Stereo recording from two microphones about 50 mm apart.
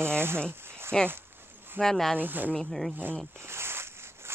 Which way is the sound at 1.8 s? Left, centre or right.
Centre.